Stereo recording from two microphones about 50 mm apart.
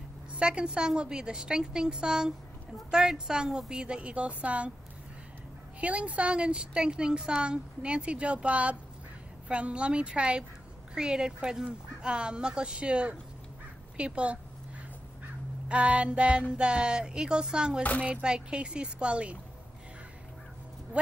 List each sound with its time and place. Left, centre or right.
0.3 s a woman's voice: right
5.8 s a woman's voice: right
15.7 s a woman's voice: right
20.9 s speech: right